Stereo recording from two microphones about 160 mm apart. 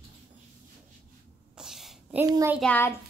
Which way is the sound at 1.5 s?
5° right (ahead or behind).